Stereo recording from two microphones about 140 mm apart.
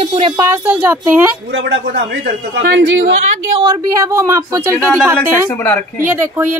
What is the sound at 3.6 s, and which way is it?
A woman's voice, 20° right (ahead or behind).